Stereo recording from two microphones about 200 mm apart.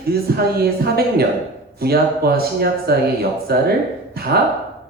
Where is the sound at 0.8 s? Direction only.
50° right (ahead or behind).